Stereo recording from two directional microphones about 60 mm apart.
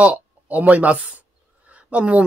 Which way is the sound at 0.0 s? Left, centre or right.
Right.